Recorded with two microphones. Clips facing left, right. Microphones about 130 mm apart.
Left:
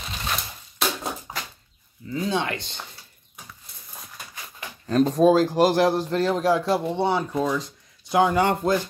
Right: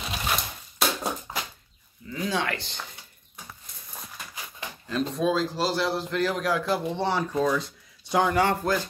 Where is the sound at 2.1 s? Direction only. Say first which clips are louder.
Left 3 dB; 20° left (ahead or behind).